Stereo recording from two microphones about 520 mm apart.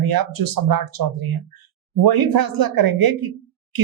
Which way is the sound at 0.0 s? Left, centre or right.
Right.